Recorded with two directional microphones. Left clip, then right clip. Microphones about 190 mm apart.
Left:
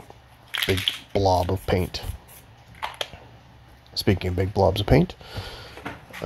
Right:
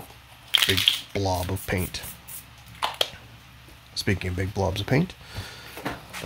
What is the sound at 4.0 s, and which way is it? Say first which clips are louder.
Speech: left 4 dB; 20° left (ahead or behind).